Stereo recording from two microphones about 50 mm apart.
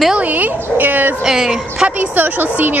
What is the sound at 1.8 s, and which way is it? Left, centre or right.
Speech, right.